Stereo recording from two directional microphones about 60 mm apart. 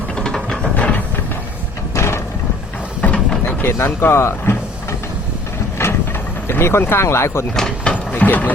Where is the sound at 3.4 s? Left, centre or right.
Left.